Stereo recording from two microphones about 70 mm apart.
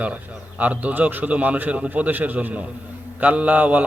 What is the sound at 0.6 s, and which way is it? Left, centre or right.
A man's voice, right.